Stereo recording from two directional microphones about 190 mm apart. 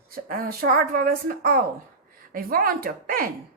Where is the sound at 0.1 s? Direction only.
50° right (ahead or behind).